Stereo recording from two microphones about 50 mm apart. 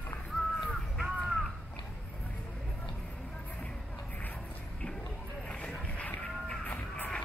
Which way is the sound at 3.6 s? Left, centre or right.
Left.